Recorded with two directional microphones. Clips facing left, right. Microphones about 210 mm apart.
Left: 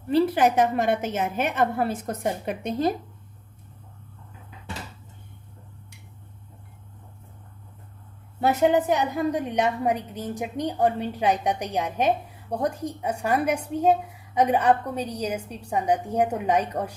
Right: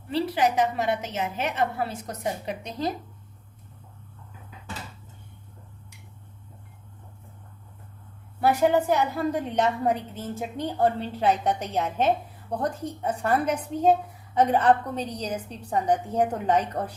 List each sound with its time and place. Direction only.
0.1 s a woman's voice: 50° left (ahead or behind)
8.4 s a woman's voice: 20° left (ahead or behind)